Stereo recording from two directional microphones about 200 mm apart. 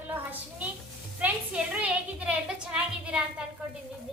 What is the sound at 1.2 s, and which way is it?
A woman's voice, 5° right (ahead or behind).